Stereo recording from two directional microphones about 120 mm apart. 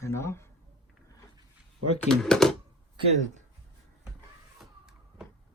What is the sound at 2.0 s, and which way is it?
Speech, 5° left (ahead or behind).